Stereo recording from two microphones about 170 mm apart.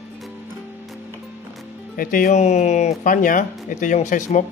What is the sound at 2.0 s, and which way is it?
Speech, 55° left (ahead or behind).